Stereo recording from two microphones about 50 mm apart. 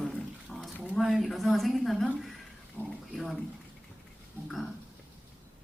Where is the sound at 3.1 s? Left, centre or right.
Centre.